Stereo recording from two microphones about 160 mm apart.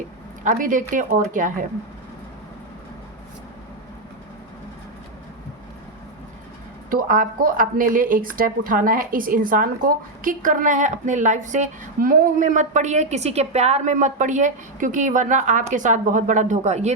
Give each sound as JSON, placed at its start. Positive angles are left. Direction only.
{"t": 0.4, "sound": "speech", "side_deg": -55}
{"t": 6.9, "sound": "speech", "side_deg": -60}